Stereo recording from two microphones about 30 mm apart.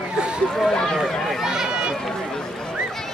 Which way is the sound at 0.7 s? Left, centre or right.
Left.